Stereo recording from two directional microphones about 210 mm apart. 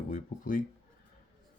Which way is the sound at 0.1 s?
40° left (ahead or behind).